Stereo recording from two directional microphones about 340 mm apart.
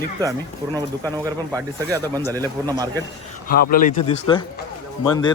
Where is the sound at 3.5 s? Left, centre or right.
Left.